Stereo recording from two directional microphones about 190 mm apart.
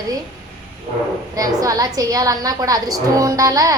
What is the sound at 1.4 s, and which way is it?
A woman's voice, 20° right (ahead or behind).